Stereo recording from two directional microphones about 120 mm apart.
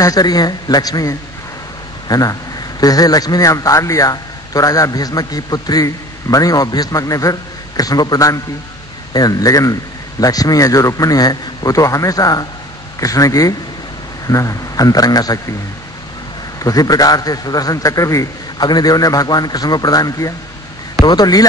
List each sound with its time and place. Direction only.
0.0 s a man's voice: 30° left (ahead or behind)
16.5 s a man's voice: 30° left (ahead or behind)